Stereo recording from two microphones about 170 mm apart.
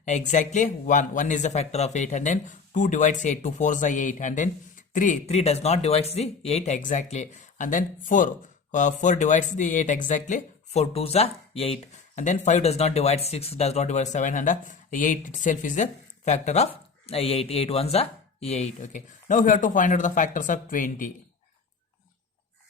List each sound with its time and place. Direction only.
0.0 s speech: 45° left (ahead or behind)